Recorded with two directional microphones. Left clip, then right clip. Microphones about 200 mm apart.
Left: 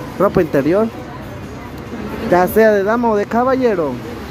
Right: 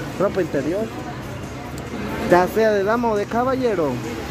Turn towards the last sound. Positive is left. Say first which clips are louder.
# left 5 dB
turn(degrees=15)  # may be behind; listen again after turning